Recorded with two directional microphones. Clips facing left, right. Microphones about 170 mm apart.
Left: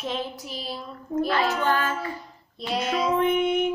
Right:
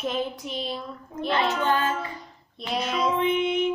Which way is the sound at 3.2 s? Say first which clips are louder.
Left 2 dB; 50° left (ahead or behind).